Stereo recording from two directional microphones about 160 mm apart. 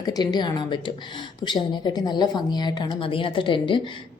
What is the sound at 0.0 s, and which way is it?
A woman's voice, 25° left (ahead or behind).